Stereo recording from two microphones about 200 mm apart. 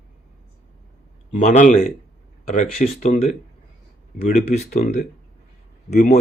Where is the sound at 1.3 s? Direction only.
40° left (ahead or behind).